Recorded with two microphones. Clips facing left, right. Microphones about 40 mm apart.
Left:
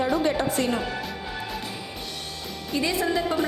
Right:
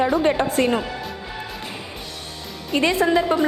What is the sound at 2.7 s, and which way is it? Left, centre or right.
Speech, right.